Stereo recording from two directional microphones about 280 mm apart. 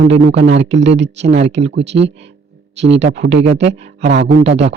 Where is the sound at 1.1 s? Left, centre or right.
Right.